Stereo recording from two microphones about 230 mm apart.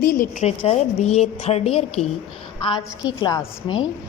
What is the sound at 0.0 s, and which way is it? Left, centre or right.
A woman's voice, left.